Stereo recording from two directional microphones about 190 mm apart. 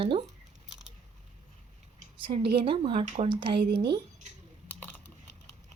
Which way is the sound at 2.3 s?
30° right (ahead or behind).